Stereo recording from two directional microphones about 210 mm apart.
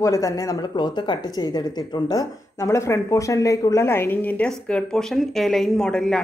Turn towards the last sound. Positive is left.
turn(degrees=5)  # may be behind; listen again after turning